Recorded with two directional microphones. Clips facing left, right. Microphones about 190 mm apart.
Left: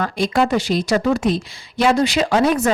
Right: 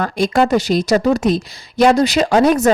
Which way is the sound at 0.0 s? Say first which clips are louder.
Right 3 dB; 45° right (ahead or behind).